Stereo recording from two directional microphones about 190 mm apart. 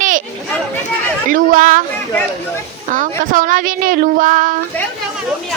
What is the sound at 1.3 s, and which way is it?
Speech, 45° right (ahead or behind).